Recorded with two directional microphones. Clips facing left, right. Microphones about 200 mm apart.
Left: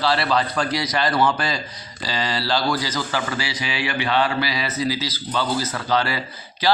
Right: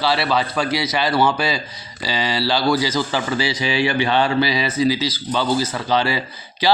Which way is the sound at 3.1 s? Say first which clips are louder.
Right 4 dB; 25° right (ahead or behind).